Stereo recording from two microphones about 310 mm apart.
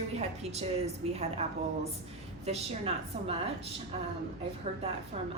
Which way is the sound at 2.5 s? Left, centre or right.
Centre.